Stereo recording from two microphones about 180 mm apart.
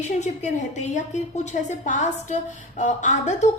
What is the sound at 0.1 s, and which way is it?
A woman's voice, 40° left (ahead or behind).